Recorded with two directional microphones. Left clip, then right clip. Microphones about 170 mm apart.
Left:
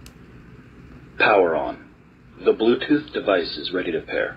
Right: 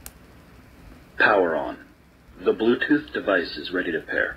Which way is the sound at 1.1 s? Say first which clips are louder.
Left 2 dB; 20° right (ahead or behind).